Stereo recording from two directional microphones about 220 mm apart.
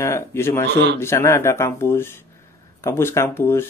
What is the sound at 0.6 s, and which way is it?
Speech, 50° right (ahead or behind).